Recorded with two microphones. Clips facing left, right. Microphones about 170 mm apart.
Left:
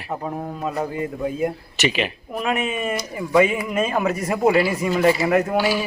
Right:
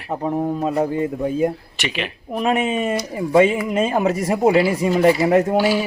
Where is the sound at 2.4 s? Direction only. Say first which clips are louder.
Right 4 dB; 30° right (ahead or behind).